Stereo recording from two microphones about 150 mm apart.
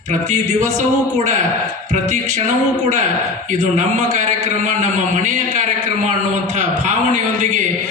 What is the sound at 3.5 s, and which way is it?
A man's voice, 55° right (ahead or behind).